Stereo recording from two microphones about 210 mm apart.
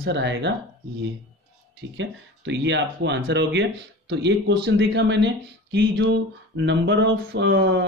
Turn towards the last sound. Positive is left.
turn(degrees=-55)  # may be behind; listen again after turning